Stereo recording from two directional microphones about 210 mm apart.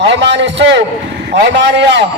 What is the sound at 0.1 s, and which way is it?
A man's voice, 55° right (ahead or behind).